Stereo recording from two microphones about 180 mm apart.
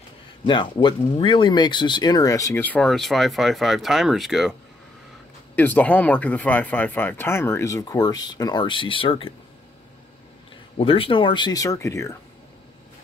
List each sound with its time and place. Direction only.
0.5 s speech: 25° left (ahead or behind); by 4.6 s centre (ahead or behind)
5.6 s speech: 10° left (ahead or behind); by 9.3 s 30° left (ahead or behind)
10.8 s speech: 30° left (ahead or behind)